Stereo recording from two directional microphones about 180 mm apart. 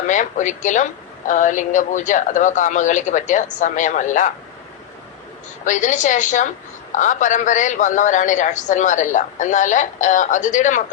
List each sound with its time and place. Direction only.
0.1 s a woman's voice: 45° left (ahead or behind)
5.6 s a woman's voice: 45° left (ahead or behind)